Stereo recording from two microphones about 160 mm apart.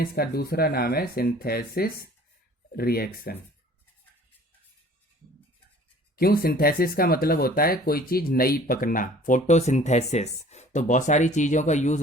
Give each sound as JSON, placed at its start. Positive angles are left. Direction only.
{"t": 0.0, "sound": "speech", "side_deg": 70}
{"t": 6.1, "sound": "speech", "side_deg": 70}